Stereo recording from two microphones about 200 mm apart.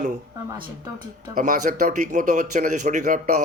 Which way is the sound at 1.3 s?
40° right (ahead or behind).